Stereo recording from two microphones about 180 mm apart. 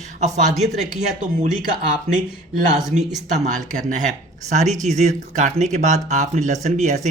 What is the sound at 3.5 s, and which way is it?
Speech, 45° right (ahead or behind).